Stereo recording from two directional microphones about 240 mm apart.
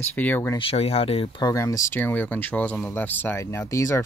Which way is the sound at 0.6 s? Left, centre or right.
Left.